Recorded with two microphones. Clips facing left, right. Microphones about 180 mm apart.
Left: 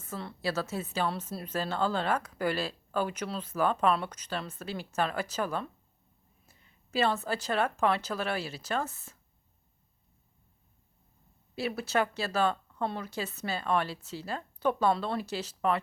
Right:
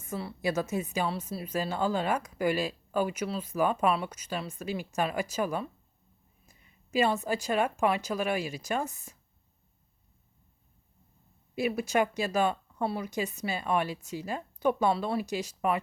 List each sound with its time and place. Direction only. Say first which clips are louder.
0.1 s speech: right 3 dB; 15° right (ahead or behind)
1.0 s speech: right 1 dB; 5° right (ahead or behind)
11.5 s speech: right 3 dB; 15° right (ahead or behind)